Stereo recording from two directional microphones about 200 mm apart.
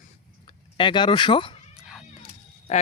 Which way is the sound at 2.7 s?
35° left (ahead or behind).